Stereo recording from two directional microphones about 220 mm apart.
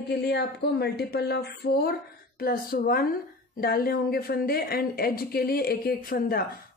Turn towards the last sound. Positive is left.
turn(degrees=40)  # may be behind; listen again after turning